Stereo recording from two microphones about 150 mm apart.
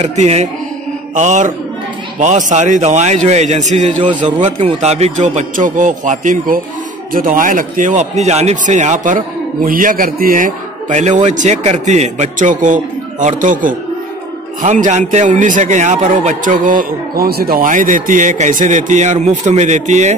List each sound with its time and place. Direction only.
0.0 s a man's voice: 50° right (ahead or behind)
9.7 s a man's voice: 70° right (ahead or behind); by 20.2 s 50° right (ahead or behind)